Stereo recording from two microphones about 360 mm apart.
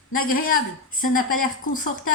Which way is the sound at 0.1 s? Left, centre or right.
Left.